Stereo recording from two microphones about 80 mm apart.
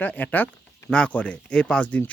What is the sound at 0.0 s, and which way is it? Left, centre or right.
A man's voice, left.